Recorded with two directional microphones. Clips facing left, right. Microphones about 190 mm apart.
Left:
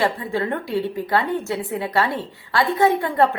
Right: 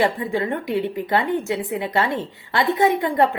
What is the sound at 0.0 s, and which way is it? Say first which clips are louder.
A woman's voice: right 1 dB; 15° right (ahead or behind).